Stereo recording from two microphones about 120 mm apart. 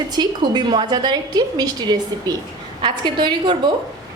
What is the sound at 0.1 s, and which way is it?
A woman's voice, 35° right (ahead or behind).